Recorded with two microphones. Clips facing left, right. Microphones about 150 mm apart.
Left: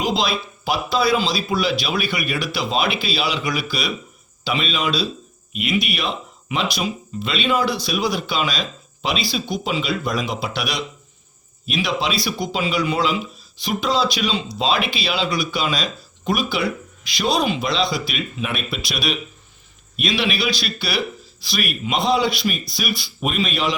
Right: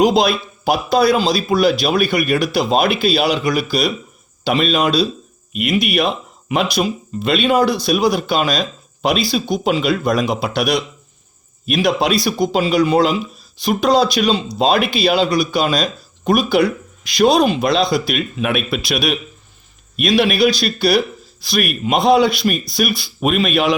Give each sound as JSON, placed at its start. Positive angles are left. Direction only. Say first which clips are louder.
{"t": 0.0, "sound": "speech", "louder": "right 8 dB", "side_deg": -50}